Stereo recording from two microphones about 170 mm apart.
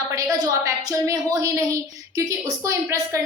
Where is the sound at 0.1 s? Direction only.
20° right (ahead or behind).